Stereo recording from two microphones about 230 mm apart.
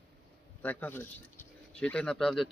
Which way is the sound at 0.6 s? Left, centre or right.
Centre.